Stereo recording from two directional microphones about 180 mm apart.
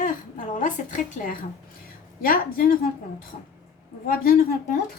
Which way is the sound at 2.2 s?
50° left (ahead or behind).